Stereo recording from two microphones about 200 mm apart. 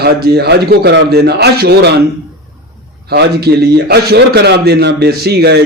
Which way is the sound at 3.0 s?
55° right (ahead or behind).